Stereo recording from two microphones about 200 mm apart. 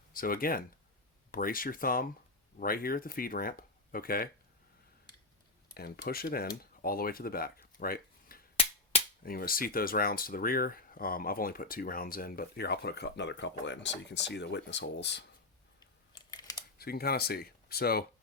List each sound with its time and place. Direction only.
0.1 s speech: 45° left (ahead or behind)
5.7 s speech: 50° left (ahead or behind)
8.5 s a sound: 30° left (ahead or behind)
9.2 s speech: 45° left (ahead or behind)
16.1 s typing: 20° left (ahead or behind)
16.7 s speech: 50° left (ahead or behind)